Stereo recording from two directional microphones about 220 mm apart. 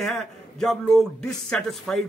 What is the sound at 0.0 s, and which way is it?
Speech, centre (ahead or behind).